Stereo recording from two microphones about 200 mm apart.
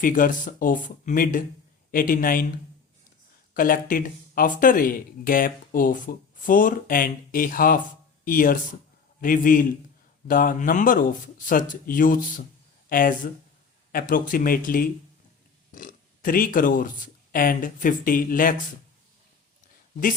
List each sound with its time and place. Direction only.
0.0 s speech: 40° left (ahead or behind)
3.5 s speech: 45° left (ahead or behind)